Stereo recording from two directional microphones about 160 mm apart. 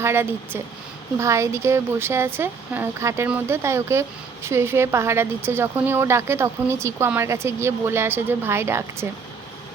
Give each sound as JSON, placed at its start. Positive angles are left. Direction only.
{"t": 0.0, "sound": "a woman's voice", "side_deg": -15}